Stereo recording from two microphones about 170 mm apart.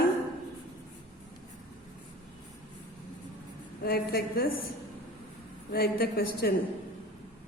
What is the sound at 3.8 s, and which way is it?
Speech, 65° left (ahead or behind).